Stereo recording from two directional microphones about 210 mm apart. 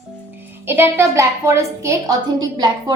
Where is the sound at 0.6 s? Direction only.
10° right (ahead or behind).